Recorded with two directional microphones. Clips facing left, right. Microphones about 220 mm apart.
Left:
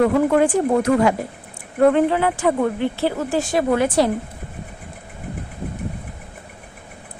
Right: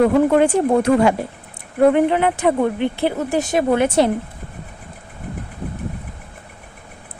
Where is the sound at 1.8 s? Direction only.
15° right (ahead or behind).